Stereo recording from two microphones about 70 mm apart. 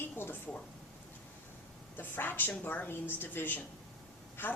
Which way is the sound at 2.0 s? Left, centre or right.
Left.